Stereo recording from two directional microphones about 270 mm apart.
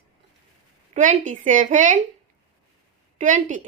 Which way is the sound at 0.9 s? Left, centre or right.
Right.